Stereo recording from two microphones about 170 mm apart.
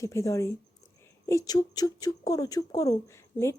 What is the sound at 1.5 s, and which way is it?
Speech, 20° left (ahead or behind).